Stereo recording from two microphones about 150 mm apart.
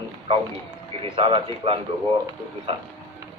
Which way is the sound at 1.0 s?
35° right (ahead or behind).